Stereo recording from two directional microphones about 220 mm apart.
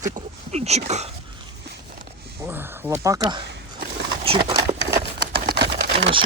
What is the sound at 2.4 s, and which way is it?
Speech, 10° right (ahead or behind).